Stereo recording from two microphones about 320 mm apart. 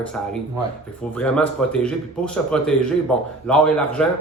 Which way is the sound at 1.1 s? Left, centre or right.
Centre.